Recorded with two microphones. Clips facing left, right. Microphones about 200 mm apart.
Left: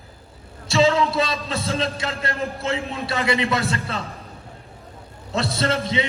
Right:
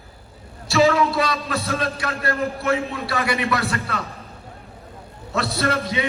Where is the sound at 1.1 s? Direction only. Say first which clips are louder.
Right 1 dB; 30° left (ahead or behind).